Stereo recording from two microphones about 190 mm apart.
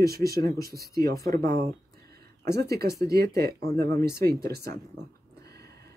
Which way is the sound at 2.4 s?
60° right (ahead or behind).